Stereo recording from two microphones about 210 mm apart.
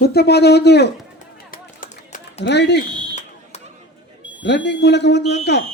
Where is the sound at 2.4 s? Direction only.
55° left (ahead or behind).